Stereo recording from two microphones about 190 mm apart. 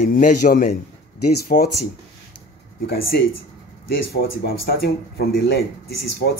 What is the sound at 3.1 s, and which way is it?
Speech, 60° left (ahead or behind).